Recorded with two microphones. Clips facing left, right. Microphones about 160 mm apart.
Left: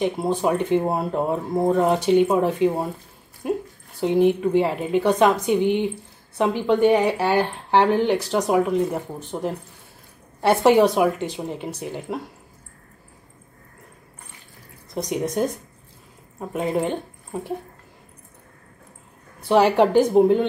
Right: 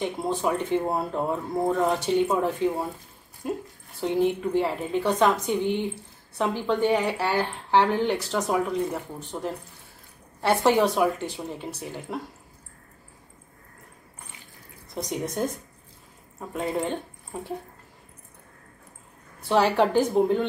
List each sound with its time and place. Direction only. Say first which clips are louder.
0.0 s speech: left 5 dB; 15° left (ahead or behind)
15.0 s speech: left 5 dB; 15° left (ahead or behind)
19.4 s speech: left 5 dB; 15° left (ahead or behind)